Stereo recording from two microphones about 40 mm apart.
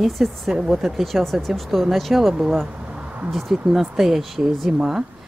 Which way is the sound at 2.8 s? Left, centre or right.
Right.